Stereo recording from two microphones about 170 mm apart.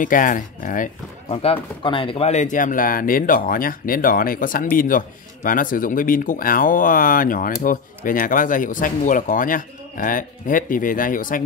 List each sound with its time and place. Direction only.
0.0 s speech: 50° left (ahead or behind)
1.3 s speech: 35° left (ahead or behind); by 11.4 s 55° left (ahead or behind)